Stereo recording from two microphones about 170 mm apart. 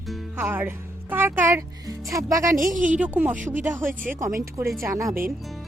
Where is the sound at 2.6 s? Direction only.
50° right (ahead or behind).